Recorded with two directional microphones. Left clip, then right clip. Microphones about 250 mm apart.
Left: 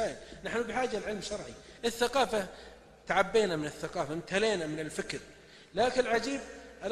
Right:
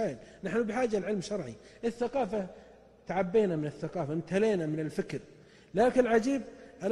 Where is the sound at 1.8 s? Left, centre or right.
Right.